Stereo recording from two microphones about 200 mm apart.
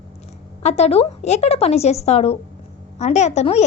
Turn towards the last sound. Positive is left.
turn(degrees=30)  # may be behind; listen again after turning